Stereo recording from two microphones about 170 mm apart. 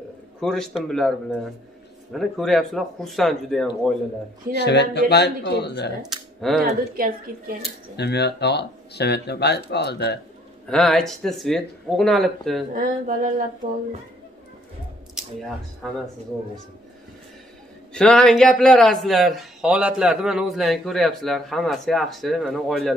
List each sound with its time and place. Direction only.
0.4 s a man's voice: centre (ahead or behind)
4.5 s speech: 80° left
6.0 s speech: centre (ahead or behind)
7.0 s a woman's voice: 60° right (ahead or behind)
7.9 s speech: 80° left
10.7 s a man's voice: centre (ahead or behind)
12.7 s a sound: 50° right (ahead or behind)
15.1 s speech: centre (ahead or behind)
17.9 s a man's voice: 5° left (ahead or behind)